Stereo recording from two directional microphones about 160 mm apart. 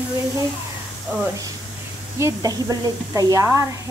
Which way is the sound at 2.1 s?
15° right (ahead or behind).